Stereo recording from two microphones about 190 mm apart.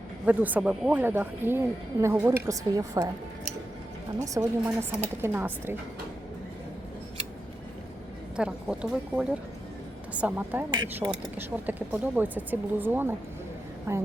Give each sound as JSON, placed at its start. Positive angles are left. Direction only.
{"t": 0.3, "sound": "a woman's voice", "side_deg": -10}
{"t": 4.4, "sound": "speech", "side_deg": -15}
{"t": 8.4, "sound": "speech", "side_deg": -5}
{"t": 10.7, "sound": "a woman's voice", "side_deg": -25}
{"t": 11.6, "sound": "speech", "side_deg": -10}